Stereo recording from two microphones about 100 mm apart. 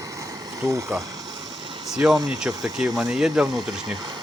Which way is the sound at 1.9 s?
5° right (ahead or behind).